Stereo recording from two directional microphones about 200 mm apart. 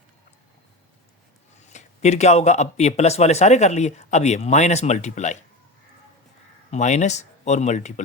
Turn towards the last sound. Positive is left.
turn(degrees=35)  # may be behind; listen again after turning